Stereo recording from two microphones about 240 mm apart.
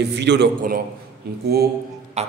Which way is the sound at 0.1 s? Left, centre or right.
Right.